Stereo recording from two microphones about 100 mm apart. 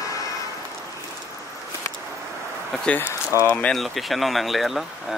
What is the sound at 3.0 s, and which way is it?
Speech, 20° right (ahead or behind).